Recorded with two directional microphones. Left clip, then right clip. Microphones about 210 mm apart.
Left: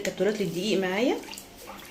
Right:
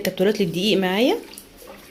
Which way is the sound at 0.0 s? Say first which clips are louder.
Right 6 dB; 40° right (ahead or behind).